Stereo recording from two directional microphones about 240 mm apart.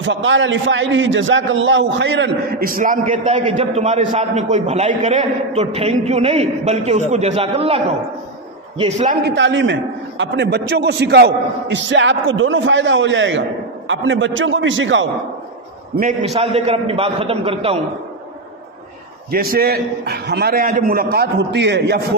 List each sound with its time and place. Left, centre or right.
0.0 s a man's voice: right
9.2 s a man's voice: right
16.3 s a man's voice: right
19.3 s a man's voice: right